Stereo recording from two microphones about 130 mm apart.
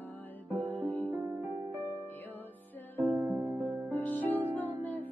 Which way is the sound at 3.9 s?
10° left (ahead or behind).